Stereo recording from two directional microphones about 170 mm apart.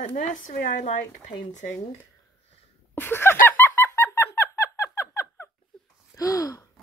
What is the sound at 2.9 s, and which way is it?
Speech, 15° left (ahead or behind).